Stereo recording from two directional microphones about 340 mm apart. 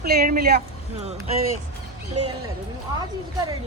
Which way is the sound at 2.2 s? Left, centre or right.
Right.